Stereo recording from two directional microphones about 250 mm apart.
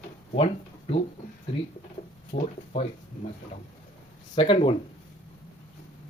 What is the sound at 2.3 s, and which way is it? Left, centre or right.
Speech, left.